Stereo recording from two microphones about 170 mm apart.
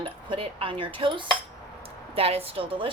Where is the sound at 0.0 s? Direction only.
30° right (ahead or behind).